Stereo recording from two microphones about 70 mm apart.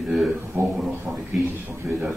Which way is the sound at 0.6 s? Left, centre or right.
Right.